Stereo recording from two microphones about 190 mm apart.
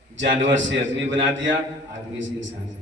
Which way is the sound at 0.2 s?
75° right (ahead or behind).